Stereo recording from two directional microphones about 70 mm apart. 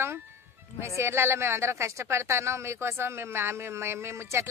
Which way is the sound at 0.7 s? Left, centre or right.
Right.